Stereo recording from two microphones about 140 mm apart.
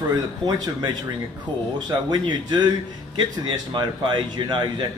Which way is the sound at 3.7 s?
35° right (ahead or behind).